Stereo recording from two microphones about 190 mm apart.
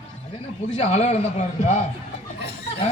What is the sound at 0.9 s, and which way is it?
Speech, 35° left (ahead or behind).